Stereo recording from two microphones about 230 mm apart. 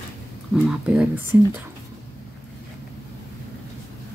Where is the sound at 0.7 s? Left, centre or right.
Centre.